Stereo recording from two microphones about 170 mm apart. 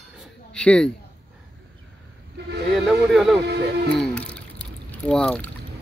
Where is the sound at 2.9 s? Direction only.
Centre (ahead or behind).